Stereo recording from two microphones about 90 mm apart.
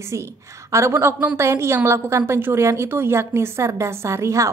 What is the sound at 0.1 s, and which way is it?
A woman's voice, 35° right (ahead or behind).